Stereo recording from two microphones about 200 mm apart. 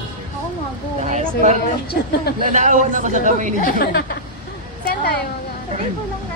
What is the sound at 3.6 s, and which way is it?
A woman's voice, 50° left (ahead or behind).